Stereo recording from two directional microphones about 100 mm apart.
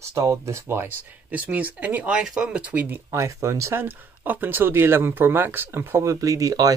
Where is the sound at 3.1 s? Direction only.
30° right (ahead or behind).